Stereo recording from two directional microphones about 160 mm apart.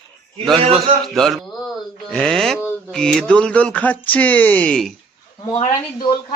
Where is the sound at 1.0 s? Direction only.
Centre (ahead or behind).